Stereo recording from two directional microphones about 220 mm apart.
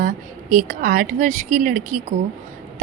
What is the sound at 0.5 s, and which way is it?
Speech, 35° right (ahead or behind).